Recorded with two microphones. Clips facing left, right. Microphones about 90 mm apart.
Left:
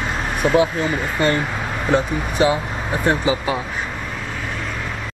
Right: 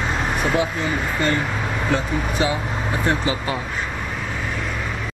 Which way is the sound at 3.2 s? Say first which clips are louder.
Left 3 dB; 20° left (ahead or behind).